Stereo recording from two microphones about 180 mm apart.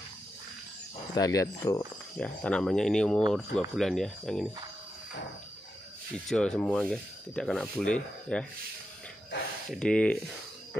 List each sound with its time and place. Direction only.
1.1 s speech: 20° left (ahead or behind)
2.1 s speech: 5° left (ahead or behind)
6.2 s speech: 5° left (ahead or behind)
9.7 s speech: 5° left (ahead or behind)